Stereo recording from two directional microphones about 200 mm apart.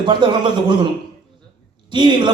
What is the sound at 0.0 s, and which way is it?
Speech, 25° right (ahead or behind).